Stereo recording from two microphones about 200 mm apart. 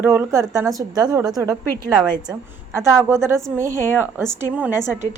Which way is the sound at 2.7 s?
15° right (ahead or behind).